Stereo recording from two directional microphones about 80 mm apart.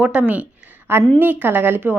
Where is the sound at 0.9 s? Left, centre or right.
Right.